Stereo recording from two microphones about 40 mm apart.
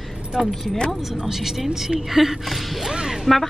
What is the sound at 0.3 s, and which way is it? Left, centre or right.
Speech, right.